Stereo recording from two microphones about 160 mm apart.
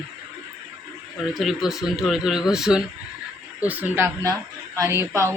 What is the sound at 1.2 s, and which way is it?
Speech, centre (ahead or behind).